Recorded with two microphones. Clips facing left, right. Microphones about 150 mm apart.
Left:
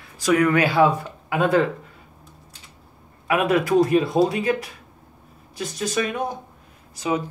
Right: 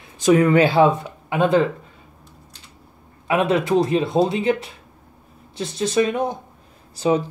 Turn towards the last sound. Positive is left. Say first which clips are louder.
# right 5 dB
turn(degrees=-30)  # may be behind; listen again after turning